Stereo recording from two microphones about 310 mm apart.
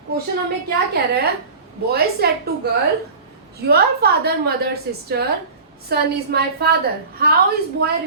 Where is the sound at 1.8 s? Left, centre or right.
Right.